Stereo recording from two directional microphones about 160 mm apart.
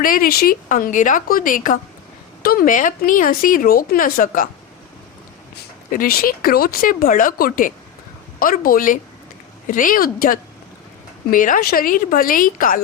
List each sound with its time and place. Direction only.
0.0 s speech: 60° left (ahead or behind)
5.9 s speech: 65° left (ahead or behind)